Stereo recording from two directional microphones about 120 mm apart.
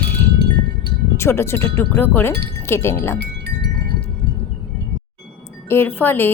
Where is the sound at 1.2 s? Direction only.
20° left (ahead or behind).